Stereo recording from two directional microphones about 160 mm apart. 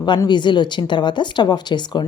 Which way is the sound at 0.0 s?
30° left (ahead or behind).